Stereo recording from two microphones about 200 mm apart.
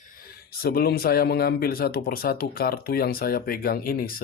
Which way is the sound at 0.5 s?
50° left (ahead or behind).